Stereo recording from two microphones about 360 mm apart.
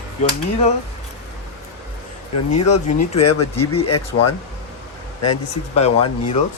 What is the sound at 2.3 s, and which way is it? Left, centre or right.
Speech, left.